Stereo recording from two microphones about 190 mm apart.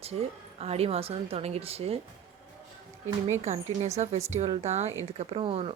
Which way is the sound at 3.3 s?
40° right (ahead or behind).